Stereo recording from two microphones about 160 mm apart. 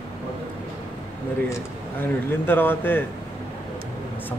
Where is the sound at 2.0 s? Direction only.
10° left (ahead or behind).